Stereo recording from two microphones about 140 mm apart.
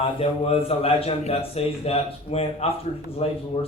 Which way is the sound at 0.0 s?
45° left (ahead or behind).